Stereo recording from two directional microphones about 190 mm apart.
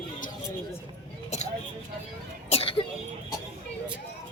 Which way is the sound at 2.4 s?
30° left (ahead or behind).